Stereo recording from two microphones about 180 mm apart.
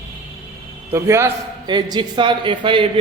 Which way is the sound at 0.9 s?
15° right (ahead or behind).